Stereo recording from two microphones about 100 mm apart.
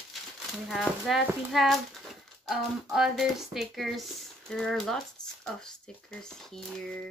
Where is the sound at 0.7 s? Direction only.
Centre (ahead or behind).